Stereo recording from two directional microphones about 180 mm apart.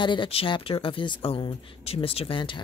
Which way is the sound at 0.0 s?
25° left (ahead or behind).